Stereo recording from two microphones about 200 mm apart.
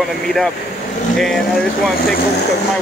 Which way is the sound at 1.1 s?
Centre (ahead or behind).